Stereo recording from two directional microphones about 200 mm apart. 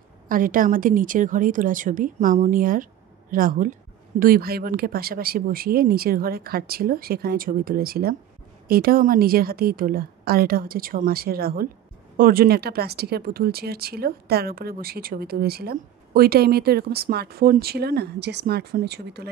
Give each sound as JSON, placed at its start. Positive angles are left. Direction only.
{"t": 0.3, "sound": "speech", "side_deg": -45}